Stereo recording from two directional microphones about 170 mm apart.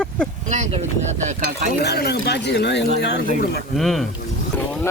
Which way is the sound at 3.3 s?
60° left (ahead or behind).